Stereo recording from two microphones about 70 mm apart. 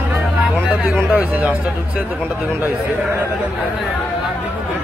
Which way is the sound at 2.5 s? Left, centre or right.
Right.